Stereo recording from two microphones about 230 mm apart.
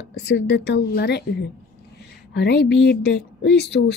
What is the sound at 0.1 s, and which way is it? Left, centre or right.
Speech, left.